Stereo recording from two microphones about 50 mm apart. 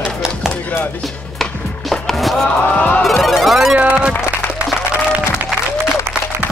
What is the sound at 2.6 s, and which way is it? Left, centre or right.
Music, left.